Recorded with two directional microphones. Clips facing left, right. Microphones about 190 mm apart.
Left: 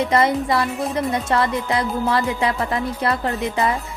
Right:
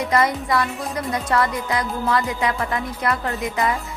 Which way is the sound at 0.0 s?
25° left (ahead or behind).